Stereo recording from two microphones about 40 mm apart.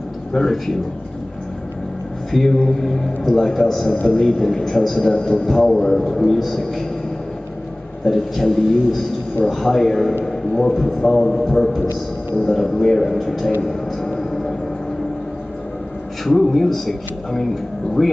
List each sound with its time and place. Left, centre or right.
0.3 s a man's voice: centre
2.3 s a man's voice: centre
8.0 s a man's voice: centre
11.0 s a man's voice: centre
13.6 s a sound: centre
16.3 s a man's voice: centre